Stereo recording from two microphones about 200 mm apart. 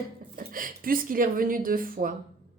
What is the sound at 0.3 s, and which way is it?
A woman's voice, 45° right (ahead or behind).